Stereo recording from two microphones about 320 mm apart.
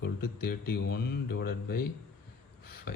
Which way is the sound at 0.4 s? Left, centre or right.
Left.